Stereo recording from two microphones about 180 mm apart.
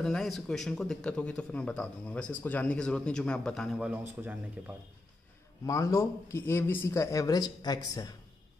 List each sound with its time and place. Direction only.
0.0 s speech: centre (ahead or behind)
5.7 s speech: 15° left (ahead or behind)